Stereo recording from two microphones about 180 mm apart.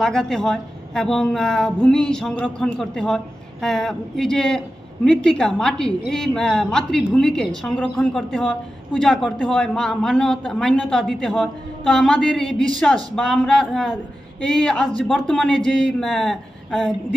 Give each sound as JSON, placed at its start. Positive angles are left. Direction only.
{"t": 0.0, "sound": "a woman's voice", "side_deg": 5}